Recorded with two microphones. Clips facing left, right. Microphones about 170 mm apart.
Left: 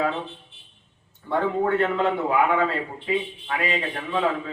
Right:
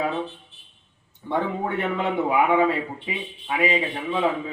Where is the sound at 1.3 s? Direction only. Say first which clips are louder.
Left 3 dB; 15° right (ahead or behind).